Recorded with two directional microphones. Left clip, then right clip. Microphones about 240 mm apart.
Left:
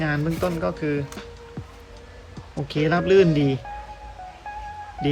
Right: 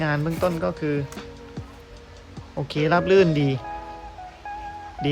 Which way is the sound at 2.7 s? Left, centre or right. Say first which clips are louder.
Even; centre.